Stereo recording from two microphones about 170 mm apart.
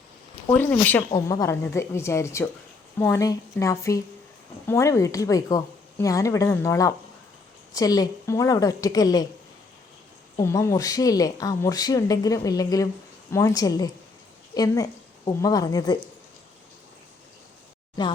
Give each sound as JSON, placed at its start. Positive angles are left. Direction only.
{"t": 0.4, "sound": "speech", "side_deg": 10}
{"t": 10.3, "sound": "a woman's voice", "side_deg": 15}